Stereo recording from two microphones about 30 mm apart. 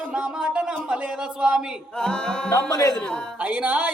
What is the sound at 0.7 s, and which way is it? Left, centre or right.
Speech, right.